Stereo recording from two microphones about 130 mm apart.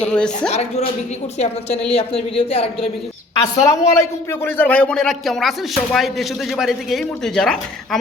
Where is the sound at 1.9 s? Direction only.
50° left (ahead or behind).